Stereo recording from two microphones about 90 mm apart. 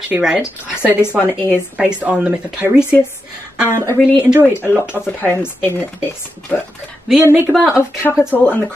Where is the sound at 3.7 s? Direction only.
40° right (ahead or behind).